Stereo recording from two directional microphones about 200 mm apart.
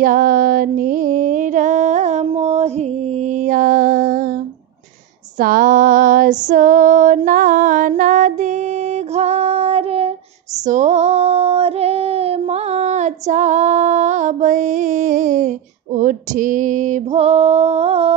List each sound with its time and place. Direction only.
0.0 s mantra: 45° right (ahead or behind)
5.4 s female singing: 45° right (ahead or behind)